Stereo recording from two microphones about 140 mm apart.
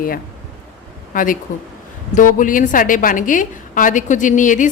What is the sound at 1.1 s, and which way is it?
A woman's voice, 75° left (ahead or behind).